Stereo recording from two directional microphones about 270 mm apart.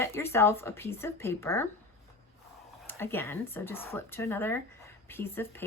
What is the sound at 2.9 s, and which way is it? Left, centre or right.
Speech, centre.